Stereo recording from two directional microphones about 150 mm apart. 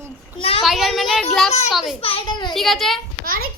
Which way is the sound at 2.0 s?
35° left (ahead or behind).